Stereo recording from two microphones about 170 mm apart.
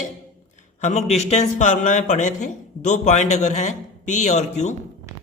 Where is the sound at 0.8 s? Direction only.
45° left (ahead or behind).